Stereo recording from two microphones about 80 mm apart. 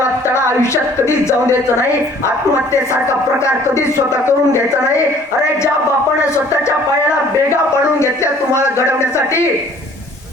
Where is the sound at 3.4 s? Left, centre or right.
Left.